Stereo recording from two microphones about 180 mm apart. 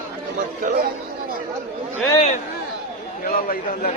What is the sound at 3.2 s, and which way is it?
Speech, 50° left (ahead or behind).